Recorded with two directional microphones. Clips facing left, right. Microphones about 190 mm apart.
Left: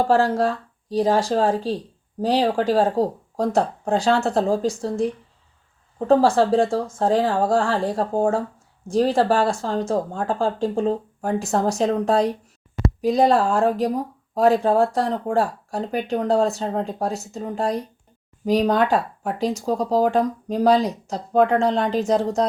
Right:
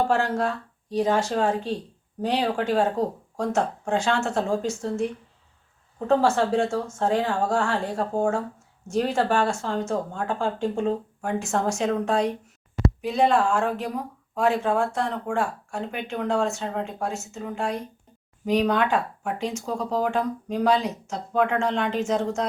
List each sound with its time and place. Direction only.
0.1 s speech: 35° left (ahead or behind)
6.1 s speech: 35° left (ahead or behind)